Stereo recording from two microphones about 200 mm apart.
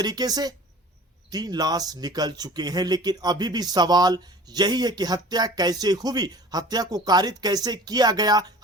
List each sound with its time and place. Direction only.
0.0 s speech: 20° right (ahead or behind)